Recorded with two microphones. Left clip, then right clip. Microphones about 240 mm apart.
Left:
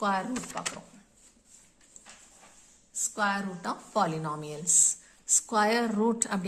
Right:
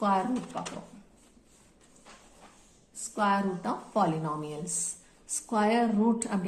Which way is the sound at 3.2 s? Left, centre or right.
Left.